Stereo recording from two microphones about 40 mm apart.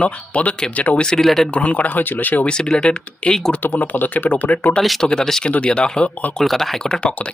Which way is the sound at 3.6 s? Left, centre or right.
Left.